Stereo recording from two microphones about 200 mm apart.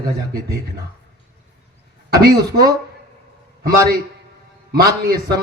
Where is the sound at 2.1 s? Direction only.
50° right (ahead or behind).